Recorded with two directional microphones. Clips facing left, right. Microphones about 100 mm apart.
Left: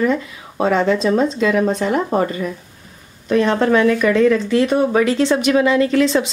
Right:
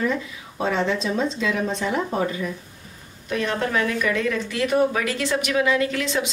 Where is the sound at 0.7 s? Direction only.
45° left (ahead or behind).